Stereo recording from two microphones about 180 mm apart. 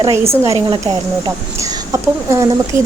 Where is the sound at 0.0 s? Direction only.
15° right (ahead or behind).